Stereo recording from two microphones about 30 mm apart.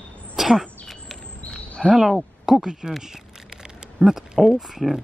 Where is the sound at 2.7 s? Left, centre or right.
Right.